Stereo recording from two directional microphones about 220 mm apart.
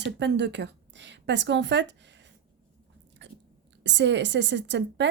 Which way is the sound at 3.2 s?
55° right (ahead or behind).